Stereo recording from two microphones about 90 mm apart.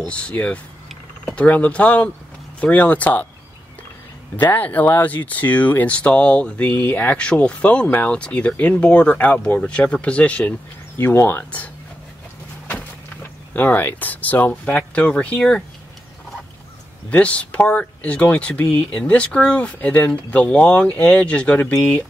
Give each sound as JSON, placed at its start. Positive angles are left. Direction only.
{"t": 0.0, "sound": "speech", "side_deg": 10}
{"t": 4.4, "sound": "speech", "side_deg": 20}
{"t": 13.5, "sound": "speech", "side_deg": 20}
{"t": 17.1, "sound": "speech", "side_deg": 15}